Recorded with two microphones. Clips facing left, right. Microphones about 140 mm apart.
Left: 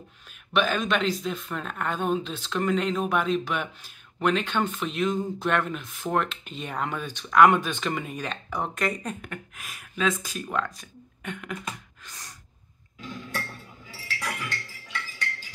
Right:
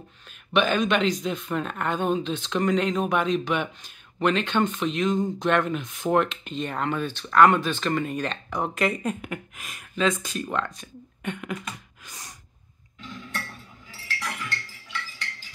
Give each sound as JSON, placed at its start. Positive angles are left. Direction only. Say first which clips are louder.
{"t": 0.5, "sound": "speech", "louder": "right 3 dB", "side_deg": 0}
{"t": 13.8, "sound": "chink", "louder": "even", "side_deg": 10}